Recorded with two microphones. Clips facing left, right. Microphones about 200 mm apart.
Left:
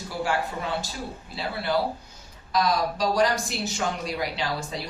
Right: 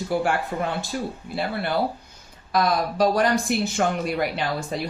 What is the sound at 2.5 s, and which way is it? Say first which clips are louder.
Speech: right 2 dB; 55° right (ahead or behind).